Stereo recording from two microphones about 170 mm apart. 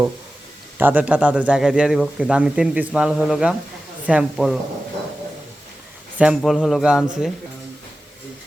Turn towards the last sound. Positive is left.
turn(degrees=-5)  # may be behind; listen again after turning